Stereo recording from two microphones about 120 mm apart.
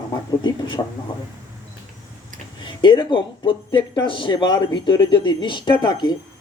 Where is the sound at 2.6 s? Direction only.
40° left (ahead or behind).